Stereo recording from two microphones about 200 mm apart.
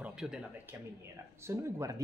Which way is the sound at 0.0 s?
5° right (ahead or behind).